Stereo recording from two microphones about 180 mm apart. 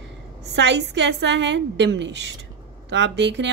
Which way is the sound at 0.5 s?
75° right (ahead or behind).